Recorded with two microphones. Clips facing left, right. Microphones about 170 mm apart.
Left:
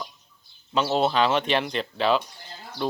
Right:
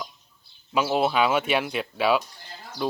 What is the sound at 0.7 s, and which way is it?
Speech, 10° right (ahead or behind).